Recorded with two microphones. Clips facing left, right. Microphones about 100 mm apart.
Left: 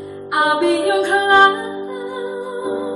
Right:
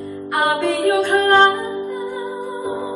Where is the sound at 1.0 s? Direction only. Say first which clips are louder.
Even; 10° left (ahead or behind).